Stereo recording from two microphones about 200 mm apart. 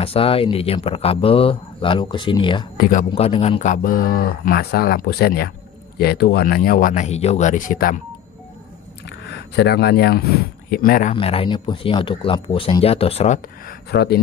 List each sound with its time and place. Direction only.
0.0 s speech: 30° left (ahead or behind)
2.8 s speech: 40° left (ahead or behind)
3.1 s speech: 30° left (ahead or behind)
9.0 s a sound: 55° left (ahead or behind)
10.7 s speech: 45° left (ahead or behind)
11.1 s speech: 25° left (ahead or behind)
13.7 s speech: 55° left (ahead or behind)